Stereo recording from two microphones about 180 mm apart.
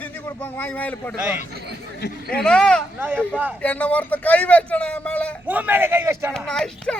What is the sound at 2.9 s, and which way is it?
Speech, 10° right (ahead or behind).